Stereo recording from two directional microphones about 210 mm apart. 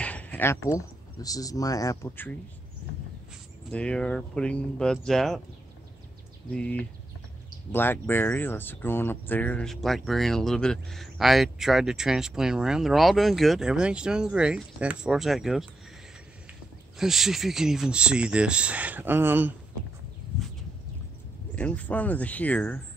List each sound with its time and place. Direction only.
0.0 s a sound: 5° left (ahead or behind)
0.7 s speech: 15° left (ahead or behind)
3.7 s speech: 5° left (ahead or behind)
6.5 s speech: 5° left (ahead or behind)
17.0 s speech: centre (ahead or behind)
21.5 s speech: 5° left (ahead or behind)